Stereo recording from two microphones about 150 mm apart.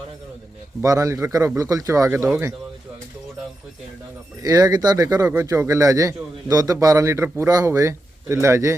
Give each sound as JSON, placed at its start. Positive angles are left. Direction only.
{"t": 0.8, "sound": "a man's voice", "side_deg": -20}
{"t": 4.4, "sound": "a man's voice", "side_deg": -25}